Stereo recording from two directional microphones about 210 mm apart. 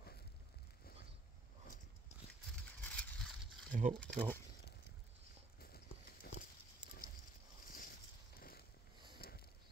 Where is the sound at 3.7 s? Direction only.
40° right (ahead or behind).